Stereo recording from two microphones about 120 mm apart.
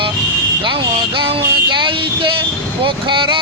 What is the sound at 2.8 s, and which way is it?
Music, 45° right (ahead or behind).